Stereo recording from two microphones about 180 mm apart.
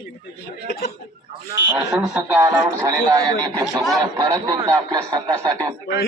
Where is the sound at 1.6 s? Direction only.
90° left.